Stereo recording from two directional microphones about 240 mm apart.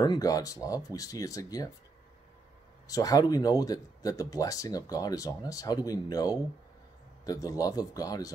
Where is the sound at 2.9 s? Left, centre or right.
Centre.